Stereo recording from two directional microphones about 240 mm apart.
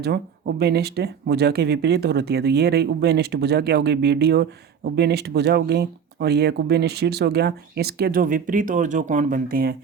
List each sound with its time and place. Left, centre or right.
0.0 s speech: right